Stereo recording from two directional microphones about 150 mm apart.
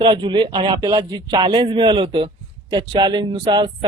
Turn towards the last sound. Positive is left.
turn(degrees=-30)  # may be behind; listen again after turning